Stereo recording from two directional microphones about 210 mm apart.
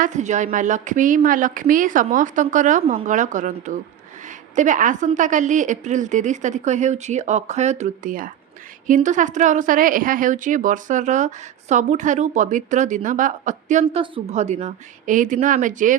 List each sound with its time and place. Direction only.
0.0 s a woman's voice: 35° right (ahead or behind)